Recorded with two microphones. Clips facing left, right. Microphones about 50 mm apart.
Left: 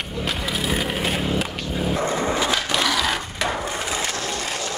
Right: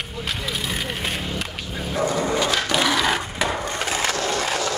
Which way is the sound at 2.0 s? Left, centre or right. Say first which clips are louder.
Right 3 dB; left.